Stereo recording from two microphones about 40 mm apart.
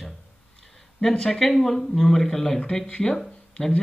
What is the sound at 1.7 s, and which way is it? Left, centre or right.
Speech, centre.